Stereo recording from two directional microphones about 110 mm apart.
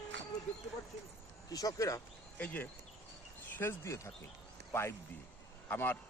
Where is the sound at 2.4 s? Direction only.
15° left (ahead or behind).